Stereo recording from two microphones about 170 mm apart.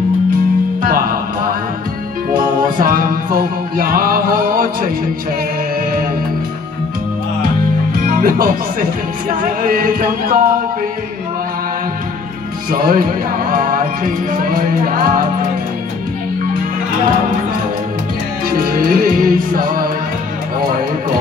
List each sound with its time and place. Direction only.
0.8 s music: 55° right (ahead or behind)
2.8 s music: 55° right (ahead or behind)
7.9 s music: 55° right (ahead or behind)
12.7 s music: 55° right (ahead or behind)
18.8 s music: 55° right (ahead or behind)